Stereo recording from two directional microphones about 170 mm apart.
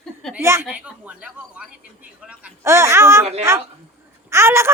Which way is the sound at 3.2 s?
40° right (ahead or behind).